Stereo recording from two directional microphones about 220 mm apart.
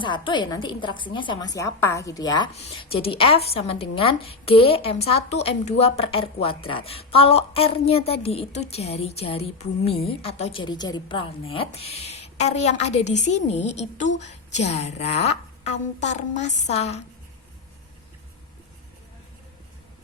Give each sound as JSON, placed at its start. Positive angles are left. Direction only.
{"t": 0.0, "sound": "a woman's voice", "side_deg": 20}